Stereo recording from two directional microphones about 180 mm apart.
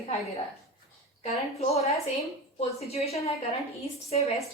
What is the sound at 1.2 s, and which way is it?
A woman's voice, 35° left (ahead or behind).